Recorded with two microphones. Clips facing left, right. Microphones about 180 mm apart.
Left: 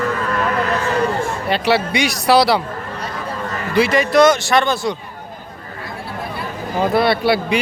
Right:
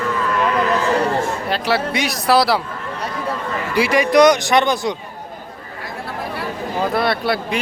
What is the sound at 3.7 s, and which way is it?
A man's voice, 10° right (ahead or behind).